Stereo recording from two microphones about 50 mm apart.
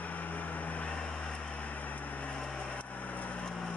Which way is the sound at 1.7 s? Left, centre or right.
Left.